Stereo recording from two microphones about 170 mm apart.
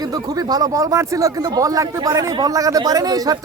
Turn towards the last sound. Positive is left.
turn(degrees=-20)  # may be behind; listen again after turning